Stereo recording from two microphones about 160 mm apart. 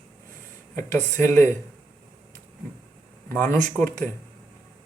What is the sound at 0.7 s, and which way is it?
Speech, 15° left (ahead or behind).